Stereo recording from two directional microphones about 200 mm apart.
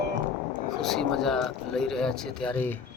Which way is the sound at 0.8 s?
Centre (ahead or behind).